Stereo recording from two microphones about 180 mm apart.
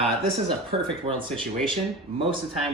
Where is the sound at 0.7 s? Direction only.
30° right (ahead or behind).